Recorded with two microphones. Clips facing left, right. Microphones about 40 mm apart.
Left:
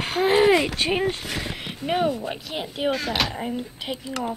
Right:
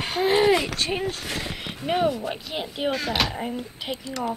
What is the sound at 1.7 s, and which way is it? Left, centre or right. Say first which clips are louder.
Speech: even; centre.